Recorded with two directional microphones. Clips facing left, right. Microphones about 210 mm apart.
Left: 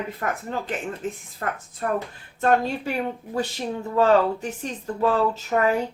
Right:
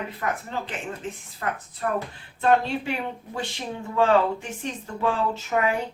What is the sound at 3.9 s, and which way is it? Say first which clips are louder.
Speech: left 2 dB; 40° left (ahead or behind).